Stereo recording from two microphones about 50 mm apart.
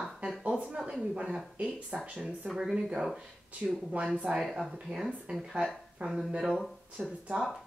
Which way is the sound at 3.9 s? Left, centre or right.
Right.